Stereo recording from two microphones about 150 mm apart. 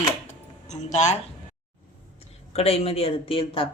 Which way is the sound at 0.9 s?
50° left (ahead or behind).